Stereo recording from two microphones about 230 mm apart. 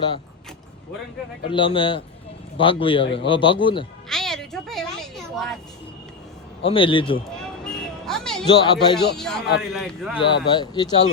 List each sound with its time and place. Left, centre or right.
1.5 s a man's voice: left
4.1 s a sound: centre
6.7 s a man's voice: left
7.3 s a sound: centre
8.4 s a man's voice: centre
9.1 s a man's voice: centre
10.2 s a man's voice: left